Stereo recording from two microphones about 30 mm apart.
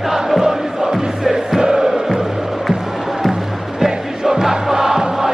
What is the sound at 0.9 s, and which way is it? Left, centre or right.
Music, centre.